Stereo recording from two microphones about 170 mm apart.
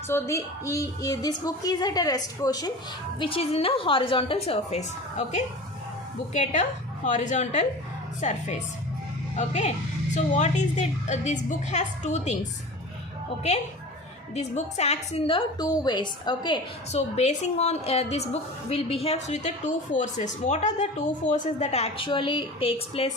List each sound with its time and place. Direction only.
0.1 s a woman's voice: 15° left (ahead or behind)
3.2 s a woman's voice: 35° left (ahead or behind)
14.3 s a woman's voice: 40° left (ahead or behind)
15.5 s a woman's voice: 25° left (ahead or behind)
16.9 s a woman's voice: 40° left (ahead or behind)